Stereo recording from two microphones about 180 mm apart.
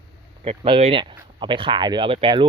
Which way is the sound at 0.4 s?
30° right (ahead or behind).